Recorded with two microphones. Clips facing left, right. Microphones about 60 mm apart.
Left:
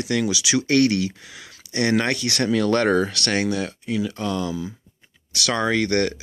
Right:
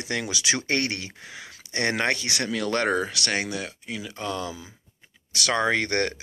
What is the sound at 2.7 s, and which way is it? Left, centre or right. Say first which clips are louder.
Speech: left 5 dB; centre.